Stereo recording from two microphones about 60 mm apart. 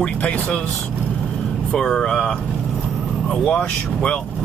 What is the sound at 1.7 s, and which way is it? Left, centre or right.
Speech, centre.